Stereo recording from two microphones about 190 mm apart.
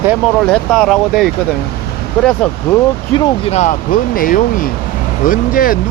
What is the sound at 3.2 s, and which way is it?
Speech, 25° left (ahead or behind).